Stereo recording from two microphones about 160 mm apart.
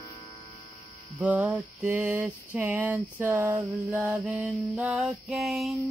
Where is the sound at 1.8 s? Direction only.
10° right (ahead or behind).